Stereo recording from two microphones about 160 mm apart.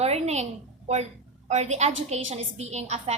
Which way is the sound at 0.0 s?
40° right (ahead or behind).